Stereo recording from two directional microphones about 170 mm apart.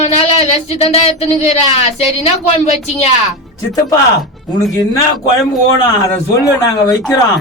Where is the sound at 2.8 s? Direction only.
40° left (ahead or behind).